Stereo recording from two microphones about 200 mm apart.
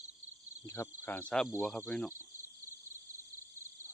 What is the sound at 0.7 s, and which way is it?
Speech, 10° left (ahead or behind).